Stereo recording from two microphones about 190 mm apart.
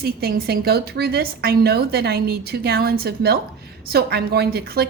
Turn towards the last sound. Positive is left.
turn(degrees=-55)  # may be behind; listen again after turning